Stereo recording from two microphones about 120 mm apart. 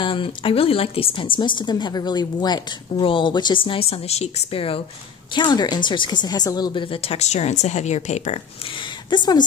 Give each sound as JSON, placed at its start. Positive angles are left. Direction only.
{"t": 0.0, "sound": "a woman's voice", "side_deg": 45}
{"t": 5.3, "sound": "a woman's voice", "side_deg": 35}
{"t": 8.7, "sound": "speech", "side_deg": 35}